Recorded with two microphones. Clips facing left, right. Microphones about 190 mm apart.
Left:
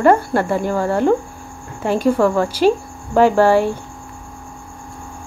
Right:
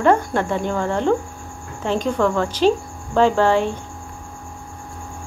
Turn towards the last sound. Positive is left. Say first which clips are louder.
# left 4 dB
turn(degrees=10)  # may be behind; listen again after turning